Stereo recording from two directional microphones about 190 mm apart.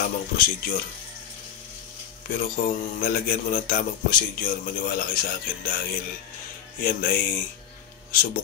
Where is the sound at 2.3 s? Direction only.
45° left (ahead or behind).